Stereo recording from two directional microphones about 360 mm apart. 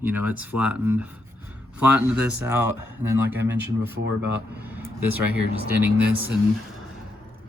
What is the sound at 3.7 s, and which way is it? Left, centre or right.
Speech, right.